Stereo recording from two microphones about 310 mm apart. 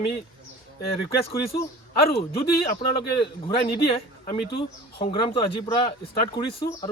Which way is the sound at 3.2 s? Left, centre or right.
Centre.